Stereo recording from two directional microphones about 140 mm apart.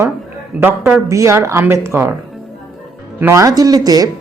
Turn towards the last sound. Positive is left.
turn(degrees=-25)  # may be behind; listen again after turning